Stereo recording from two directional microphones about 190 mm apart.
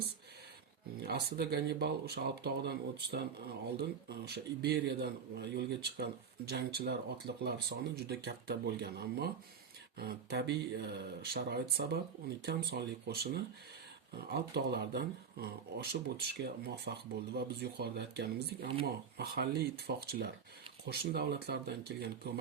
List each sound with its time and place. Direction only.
0.9 s speech: 55° right (ahead or behind)